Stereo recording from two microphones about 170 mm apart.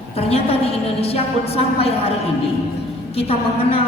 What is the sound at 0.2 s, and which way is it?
A woman's voice, 35° left (ahead or behind).